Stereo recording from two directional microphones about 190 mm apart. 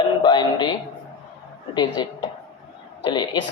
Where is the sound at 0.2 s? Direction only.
25° left (ahead or behind).